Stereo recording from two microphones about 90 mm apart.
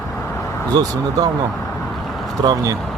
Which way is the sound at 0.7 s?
50° right (ahead or behind).